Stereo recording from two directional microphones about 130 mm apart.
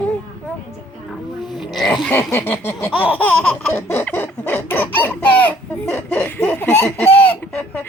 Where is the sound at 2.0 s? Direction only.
15° left (ahead or behind).